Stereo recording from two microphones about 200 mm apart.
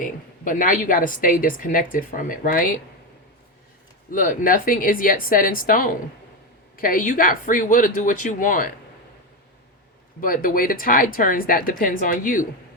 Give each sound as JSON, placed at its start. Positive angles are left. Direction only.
{"t": 0.0, "sound": "a woman's voice", "side_deg": 40}
{"t": 4.1, "sound": "a woman's voice", "side_deg": 40}
{"t": 10.2, "sound": "a woman's voice", "side_deg": 45}